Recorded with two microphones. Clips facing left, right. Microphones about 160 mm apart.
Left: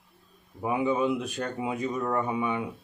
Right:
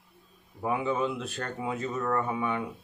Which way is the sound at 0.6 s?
15° left (ahead or behind).